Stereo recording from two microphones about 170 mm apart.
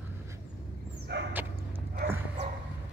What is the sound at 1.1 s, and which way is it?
Dog, 90° right.